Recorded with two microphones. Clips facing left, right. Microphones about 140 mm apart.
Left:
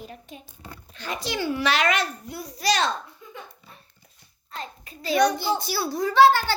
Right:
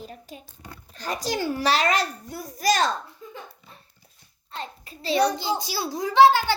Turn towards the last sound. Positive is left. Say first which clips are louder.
# right 1 dB
turn(degrees=-15)  # may be behind; listen again after turning